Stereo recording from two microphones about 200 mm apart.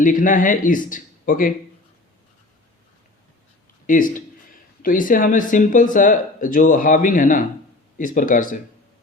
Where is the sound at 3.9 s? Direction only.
40° left (ahead or behind).